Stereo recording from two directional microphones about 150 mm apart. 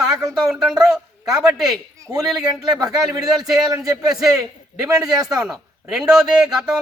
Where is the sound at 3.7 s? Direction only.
25° right (ahead or behind).